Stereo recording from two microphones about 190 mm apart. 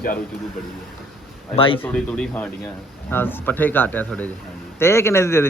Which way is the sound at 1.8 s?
10° left (ahead or behind).